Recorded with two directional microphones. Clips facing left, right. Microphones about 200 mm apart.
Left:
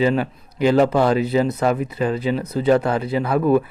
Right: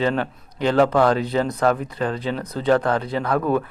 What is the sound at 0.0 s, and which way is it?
Speech, 10° left (ahead or behind).